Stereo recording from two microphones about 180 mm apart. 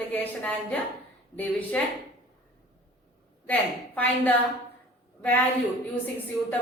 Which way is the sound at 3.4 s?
10° left (ahead or behind).